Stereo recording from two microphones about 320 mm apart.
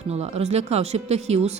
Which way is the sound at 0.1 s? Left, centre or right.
Centre.